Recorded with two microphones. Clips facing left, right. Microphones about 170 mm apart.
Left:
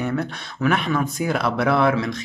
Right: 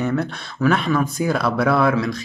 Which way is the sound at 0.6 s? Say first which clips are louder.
Right 3 dB; 20° left (ahead or behind).